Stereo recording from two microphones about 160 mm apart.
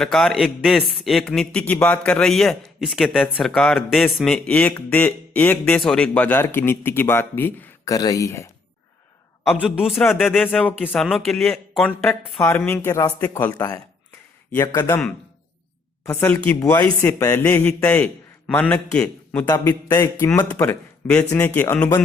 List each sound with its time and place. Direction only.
0.0 s a man's voice: centre (ahead or behind); by 8.4 s 20° left (ahead or behind)
9.5 s speech: 5° right (ahead or behind)
10.4 s a man's voice: 10° left (ahead or behind)
13.5 s a man's voice: 25° left (ahead or behind)
16.0 s a man's voice: 10° left (ahead or behind)
17.1 s a man's voice: 20° left (ahead or behind)
19.5 s a man's voice: 20° left (ahead or behind)